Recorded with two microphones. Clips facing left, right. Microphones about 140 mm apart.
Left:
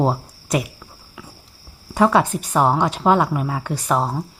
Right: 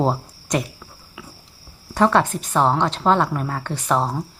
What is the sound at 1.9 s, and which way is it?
A woman's voice, 5° left (ahead or behind).